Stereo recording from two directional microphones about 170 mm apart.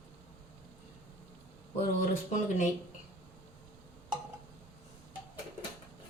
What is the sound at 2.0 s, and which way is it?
Speech, 45° left (ahead or behind).